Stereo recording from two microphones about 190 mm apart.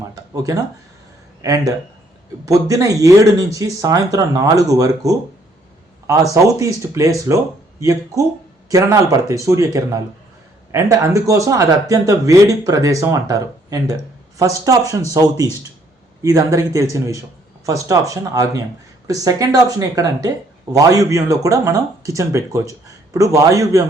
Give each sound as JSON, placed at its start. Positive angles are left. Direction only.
{"t": 1.4, "sound": "speech", "side_deg": -15}
{"t": 6.3, "sound": "speech", "side_deg": -15}